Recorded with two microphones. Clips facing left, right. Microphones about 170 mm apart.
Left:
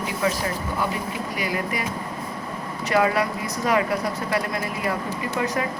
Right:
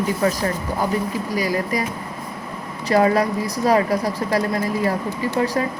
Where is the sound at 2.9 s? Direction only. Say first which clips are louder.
Right 4 dB; 35° right (ahead or behind).